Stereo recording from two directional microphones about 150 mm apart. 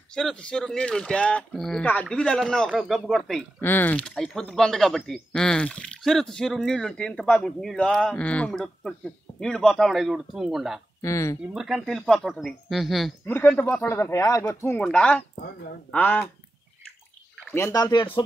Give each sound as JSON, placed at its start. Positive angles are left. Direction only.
{"t": 0.1, "sound": "speech", "side_deg": 5}
{"t": 3.6, "sound": "speech", "side_deg": 15}
{"t": 11.0, "sound": "speech", "side_deg": 20}
{"t": 11.5, "sound": "speech", "side_deg": -5}
{"t": 13.2, "sound": "speech", "side_deg": 15}
{"t": 15.3, "sound": "a woman's voice", "side_deg": 70}
{"t": 15.9, "sound": "speech", "side_deg": 10}
{"t": 17.6, "sound": "speech", "side_deg": 15}